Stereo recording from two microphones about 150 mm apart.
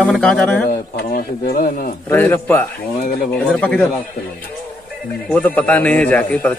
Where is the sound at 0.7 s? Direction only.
85° left.